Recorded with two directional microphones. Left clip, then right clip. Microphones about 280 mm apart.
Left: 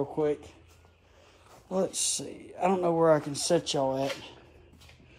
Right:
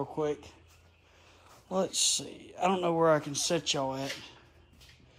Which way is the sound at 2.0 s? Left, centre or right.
Centre.